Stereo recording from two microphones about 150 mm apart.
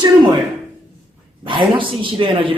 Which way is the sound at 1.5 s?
35° right (ahead or behind).